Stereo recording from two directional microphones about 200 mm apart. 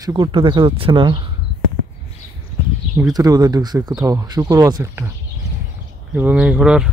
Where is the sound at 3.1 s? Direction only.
20° right (ahead or behind).